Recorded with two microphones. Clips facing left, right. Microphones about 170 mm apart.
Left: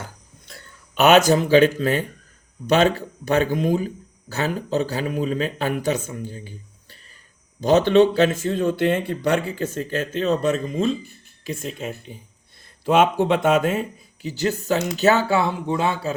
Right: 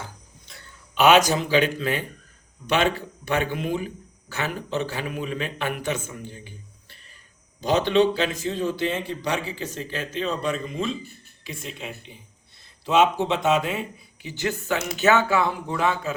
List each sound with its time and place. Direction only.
0.9 s speech: 45° left (ahead or behind)
6.3 s a sound: 40° left (ahead or behind)
7.6 s speech: 45° left (ahead or behind); by 16.1 s 30° left (ahead or behind)